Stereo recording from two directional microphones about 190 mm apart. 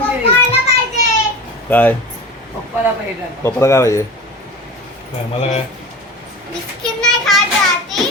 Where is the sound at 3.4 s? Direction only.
15° left (ahead or behind).